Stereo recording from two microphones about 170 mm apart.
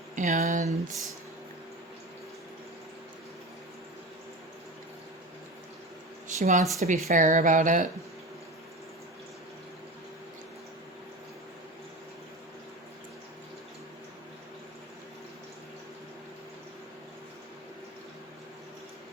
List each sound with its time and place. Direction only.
0.2 s speech: 45° right (ahead or behind)
6.2 s speech: 45° right (ahead or behind)
6.7 s a sound: 40° right (ahead or behind)